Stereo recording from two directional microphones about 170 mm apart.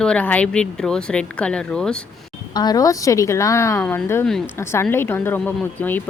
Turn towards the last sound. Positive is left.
turn(degrees=10)  # may be behind; listen again after turning